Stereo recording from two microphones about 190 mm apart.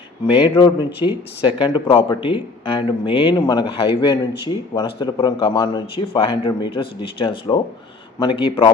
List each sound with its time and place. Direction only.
0.3 s speech: 25° left (ahead or behind)